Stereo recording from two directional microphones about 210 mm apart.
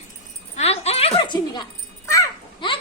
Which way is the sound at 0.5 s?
30° left (ahead or behind).